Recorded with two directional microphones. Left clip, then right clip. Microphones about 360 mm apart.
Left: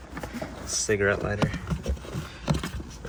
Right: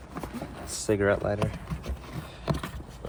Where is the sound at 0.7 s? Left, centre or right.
Centre.